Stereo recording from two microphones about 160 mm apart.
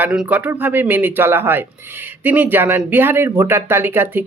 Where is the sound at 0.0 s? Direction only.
5° right (ahead or behind).